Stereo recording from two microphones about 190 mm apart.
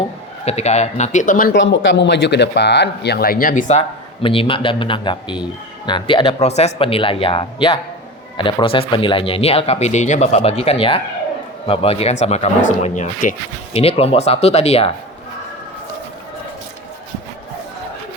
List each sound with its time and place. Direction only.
0.4 s speech: 35° left (ahead or behind)
1.5 s speech: 75° left (ahead or behind); by 13.3 s 40° left (ahead or behind)
13.7 s speech: 30° left (ahead or behind)